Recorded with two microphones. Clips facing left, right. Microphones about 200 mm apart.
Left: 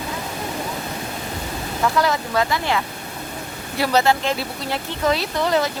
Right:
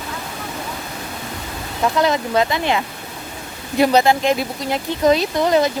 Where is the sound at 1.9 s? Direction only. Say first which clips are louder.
Right 4 dB; 20° right (ahead or behind).